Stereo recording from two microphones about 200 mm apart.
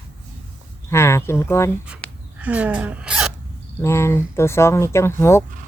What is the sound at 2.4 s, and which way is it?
Hiccup, 5° right (ahead or behind).